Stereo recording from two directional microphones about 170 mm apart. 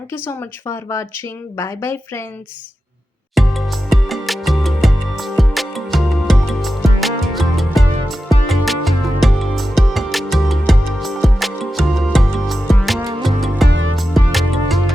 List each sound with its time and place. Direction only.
0.1 s speech: 15° left (ahead or behind)
3.3 s music: centre (ahead or behind)
13.0 s music: 25° right (ahead or behind)
13.2 s music: centre (ahead or behind)